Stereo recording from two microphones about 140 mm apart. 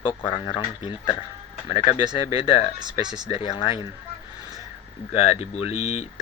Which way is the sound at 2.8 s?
30° right (ahead or behind).